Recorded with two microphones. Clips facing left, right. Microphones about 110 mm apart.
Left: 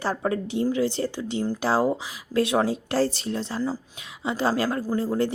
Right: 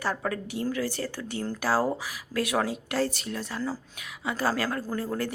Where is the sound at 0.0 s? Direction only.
25° left (ahead or behind).